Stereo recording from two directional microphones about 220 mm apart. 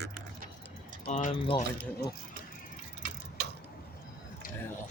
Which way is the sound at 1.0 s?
30° left (ahead or behind).